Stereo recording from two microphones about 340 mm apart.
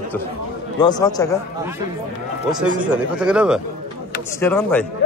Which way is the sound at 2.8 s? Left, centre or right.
Centre.